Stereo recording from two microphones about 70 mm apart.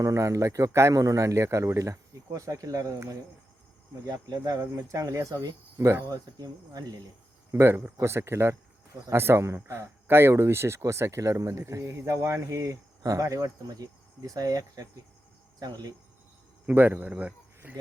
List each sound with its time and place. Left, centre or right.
0.0 s a man's voice: right
5.7 s speech: right
6.1 s speech: right
7.5 s a man's voice: right
13.0 s speech: right
16.6 s speech: right